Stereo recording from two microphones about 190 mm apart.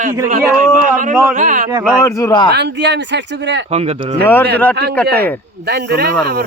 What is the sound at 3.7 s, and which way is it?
Speech, 35° right (ahead or behind).